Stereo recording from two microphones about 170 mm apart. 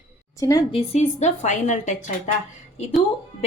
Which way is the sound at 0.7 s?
40° left (ahead or behind).